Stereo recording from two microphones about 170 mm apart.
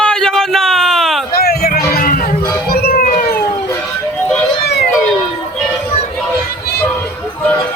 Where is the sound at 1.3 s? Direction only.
65° left (ahead or behind).